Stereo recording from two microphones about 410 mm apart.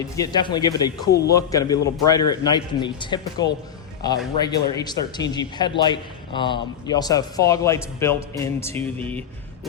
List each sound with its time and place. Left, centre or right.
0.2 s a man's voice: centre